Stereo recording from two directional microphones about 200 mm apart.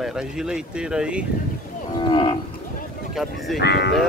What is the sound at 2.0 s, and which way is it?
Livestock, 25° left (ahead or behind).